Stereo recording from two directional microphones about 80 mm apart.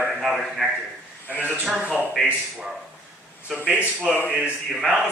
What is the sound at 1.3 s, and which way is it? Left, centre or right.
Speech, left.